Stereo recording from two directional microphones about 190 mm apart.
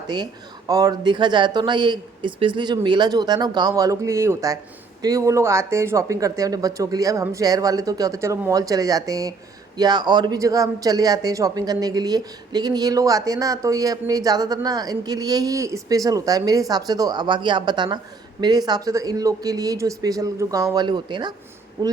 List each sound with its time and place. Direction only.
0.7 s a man's voice: 20° right (ahead or behind)